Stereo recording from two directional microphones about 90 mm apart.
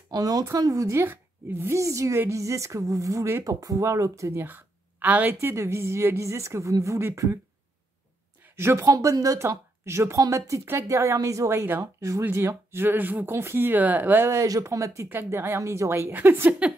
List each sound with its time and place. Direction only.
0.1 s a woman's voice: 45° right (ahead or behind)
4.5 s a woman's voice: 20° right (ahead or behind)
8.5 s a woman's voice: 30° right (ahead or behind)